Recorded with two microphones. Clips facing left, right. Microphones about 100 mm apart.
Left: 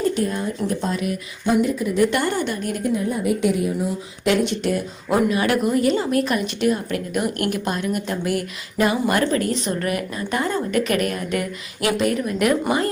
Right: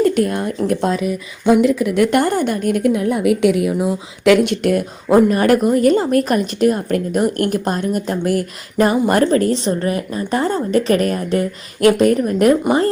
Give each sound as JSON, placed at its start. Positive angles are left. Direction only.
{"t": 0.0, "sound": "speech", "side_deg": -65}
{"t": 1.6, "sound": "speech", "side_deg": -90}
{"t": 2.1, "sound": "a woman's voice", "side_deg": -50}
{"t": 11.8, "sound": "a woman's voice", "side_deg": -45}